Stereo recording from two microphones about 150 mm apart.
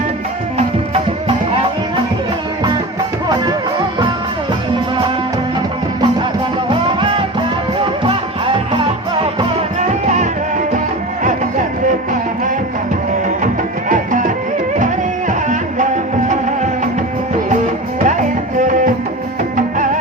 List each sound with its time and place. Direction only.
6.7 s music: 35° right (ahead or behind)
13.9 s music: 60° right (ahead or behind)
18.0 s music: 55° right (ahead or behind)